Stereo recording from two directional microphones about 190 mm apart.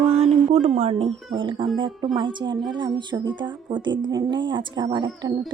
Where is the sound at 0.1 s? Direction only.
30° right (ahead or behind).